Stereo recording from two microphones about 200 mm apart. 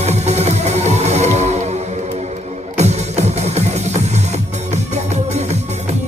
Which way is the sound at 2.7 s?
35° right (ahead or behind).